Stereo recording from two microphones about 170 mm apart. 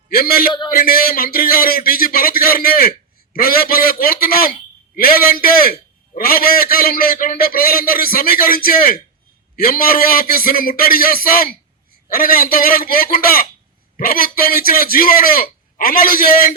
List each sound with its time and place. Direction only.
0.1 s a man's voice: 60° left (ahead or behind)